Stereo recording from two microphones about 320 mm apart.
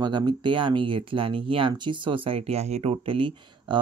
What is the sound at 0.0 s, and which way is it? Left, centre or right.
Speech, centre.